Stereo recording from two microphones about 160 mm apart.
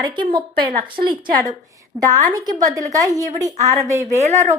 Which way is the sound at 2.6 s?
20° right (ahead or behind).